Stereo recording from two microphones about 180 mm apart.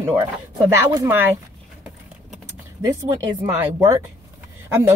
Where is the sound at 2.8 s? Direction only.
15° right (ahead or behind).